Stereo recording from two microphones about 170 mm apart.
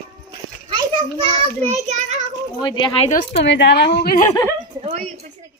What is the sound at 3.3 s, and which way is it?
Speech, 90° left.